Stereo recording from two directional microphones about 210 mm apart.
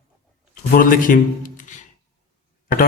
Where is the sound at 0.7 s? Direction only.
40° left (ahead or behind).